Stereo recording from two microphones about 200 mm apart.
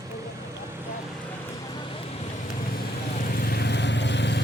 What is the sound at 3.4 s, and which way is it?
Vehicle, 50° left (ahead or behind).